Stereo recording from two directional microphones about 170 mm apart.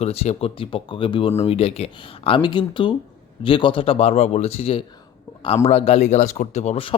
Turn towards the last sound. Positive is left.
turn(degrees=35)  # may be behind; listen again after turning